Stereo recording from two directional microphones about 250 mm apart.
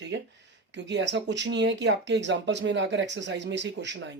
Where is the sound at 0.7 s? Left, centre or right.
Right.